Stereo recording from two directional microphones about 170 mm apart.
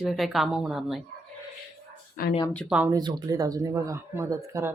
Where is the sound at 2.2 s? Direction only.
55° left (ahead or behind).